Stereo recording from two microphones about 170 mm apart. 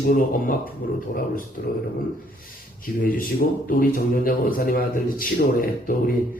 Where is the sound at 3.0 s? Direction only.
55° left (ahead or behind).